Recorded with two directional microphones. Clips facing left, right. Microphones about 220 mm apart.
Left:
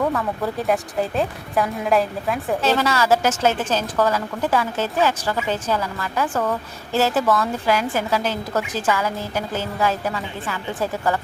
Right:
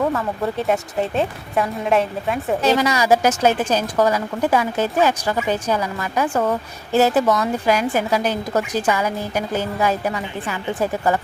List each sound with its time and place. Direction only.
0.0 s a woman's voice: centre (ahead or behind)
2.6 s a woman's voice: 15° right (ahead or behind)